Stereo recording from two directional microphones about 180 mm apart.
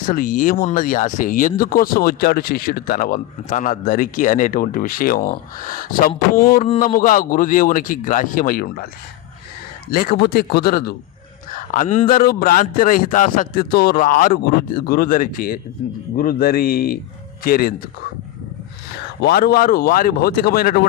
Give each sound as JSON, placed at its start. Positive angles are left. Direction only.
{"t": 0.1, "sound": "speech", "side_deg": 50}
{"t": 9.9, "sound": "speech", "side_deg": 55}
{"t": 11.7, "sound": "speech", "side_deg": 45}
{"t": 19.2, "sound": "speech", "side_deg": 60}